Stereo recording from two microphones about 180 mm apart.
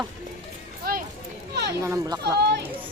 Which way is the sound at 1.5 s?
65° right (ahead or behind).